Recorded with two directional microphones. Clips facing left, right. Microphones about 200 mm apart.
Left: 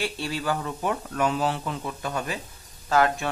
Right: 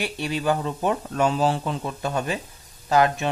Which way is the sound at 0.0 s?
20° right (ahead or behind).